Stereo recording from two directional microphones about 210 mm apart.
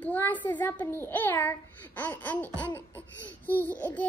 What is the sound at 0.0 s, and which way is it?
A woman's voice, 10° left (ahead or behind).